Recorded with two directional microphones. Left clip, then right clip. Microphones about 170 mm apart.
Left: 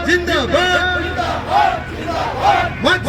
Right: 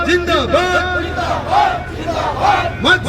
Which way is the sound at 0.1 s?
Centre (ahead or behind).